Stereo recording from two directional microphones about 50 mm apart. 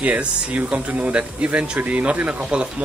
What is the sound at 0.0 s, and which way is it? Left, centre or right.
Speech, right.